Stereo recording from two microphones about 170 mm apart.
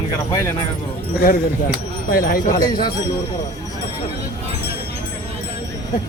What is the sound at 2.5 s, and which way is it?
Speech, 20° left (ahead or behind).